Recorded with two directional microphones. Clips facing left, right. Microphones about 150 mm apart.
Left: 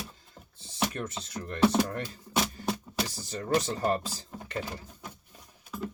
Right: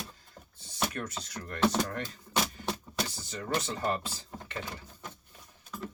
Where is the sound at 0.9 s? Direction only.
25° left (ahead or behind).